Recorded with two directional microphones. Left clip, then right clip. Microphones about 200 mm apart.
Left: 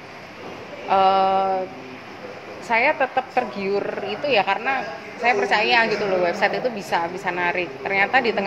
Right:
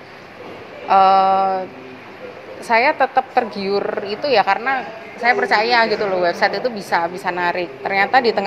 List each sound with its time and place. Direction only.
0.8 s a woman's voice: 30° right (ahead or behind)
2.7 s a woman's voice: 25° right (ahead or behind)